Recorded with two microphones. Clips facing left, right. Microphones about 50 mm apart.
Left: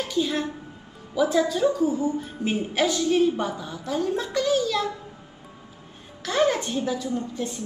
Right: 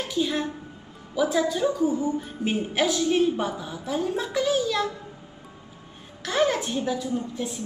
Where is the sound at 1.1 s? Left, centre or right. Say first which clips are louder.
Left 2 dB; centre.